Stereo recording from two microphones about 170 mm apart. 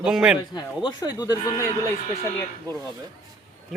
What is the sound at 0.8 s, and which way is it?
Speech, 25° left (ahead or behind).